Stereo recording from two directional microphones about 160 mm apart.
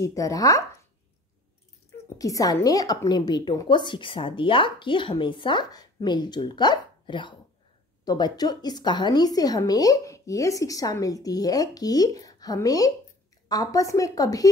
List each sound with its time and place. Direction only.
0.0 s a woman's voice: 20° left (ahead or behind)
2.1 s a woman's voice: 20° left (ahead or behind)